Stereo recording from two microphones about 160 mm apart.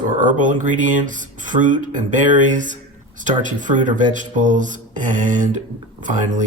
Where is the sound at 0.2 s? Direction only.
55° right (ahead or behind).